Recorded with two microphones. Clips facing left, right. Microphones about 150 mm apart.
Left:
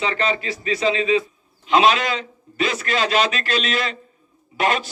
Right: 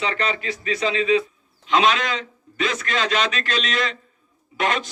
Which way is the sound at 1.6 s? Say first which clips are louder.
Left 3 dB; 5° left (ahead or behind).